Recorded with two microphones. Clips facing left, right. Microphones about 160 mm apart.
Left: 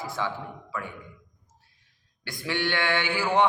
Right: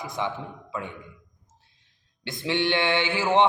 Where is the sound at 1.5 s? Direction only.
25° right (ahead or behind).